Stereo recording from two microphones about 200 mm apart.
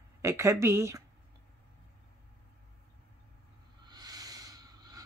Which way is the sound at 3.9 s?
20° right (ahead or behind).